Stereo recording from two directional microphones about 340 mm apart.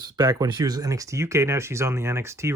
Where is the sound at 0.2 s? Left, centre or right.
Centre.